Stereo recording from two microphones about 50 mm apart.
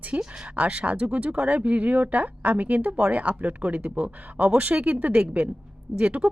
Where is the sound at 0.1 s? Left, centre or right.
Right.